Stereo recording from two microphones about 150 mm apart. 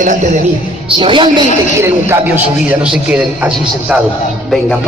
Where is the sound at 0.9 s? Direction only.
35° right (ahead or behind).